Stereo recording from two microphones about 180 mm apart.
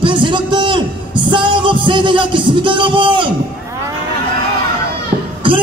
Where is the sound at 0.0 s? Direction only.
25° right (ahead or behind).